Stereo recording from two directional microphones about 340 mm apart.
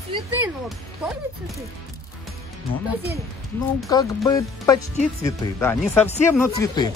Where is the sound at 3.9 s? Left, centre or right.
Centre.